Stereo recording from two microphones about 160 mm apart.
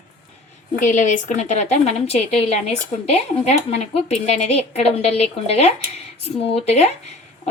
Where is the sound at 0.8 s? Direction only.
50° left (ahead or behind).